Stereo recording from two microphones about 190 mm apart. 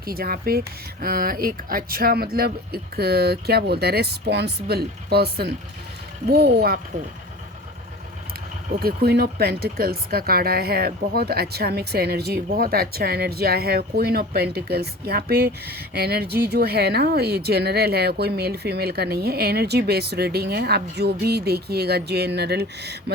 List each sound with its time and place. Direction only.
0.0 s speech: 55° right (ahead or behind)
8.8 s speech: 55° right (ahead or behind)